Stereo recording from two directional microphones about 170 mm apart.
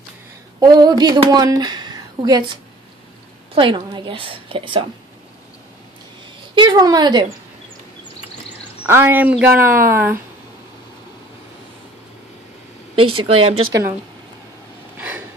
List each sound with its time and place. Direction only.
0.6 s a woman's voice: 25° right (ahead or behind)
6.5 s a woman's voice: 25° right (ahead or behind)
8.8 s a woman's voice: 15° right (ahead or behind)
12.9 s a woman's voice: 35° right (ahead or behind)
15.0 s a sound: 10° right (ahead or behind)